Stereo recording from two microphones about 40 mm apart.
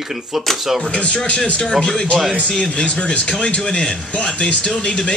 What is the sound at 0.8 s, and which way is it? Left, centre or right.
Speech, left.